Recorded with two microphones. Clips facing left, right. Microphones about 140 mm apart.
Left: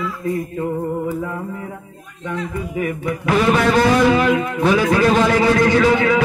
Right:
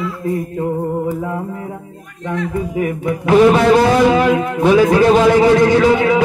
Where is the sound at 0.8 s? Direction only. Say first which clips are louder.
Right 3 dB; 20° right (ahead or behind).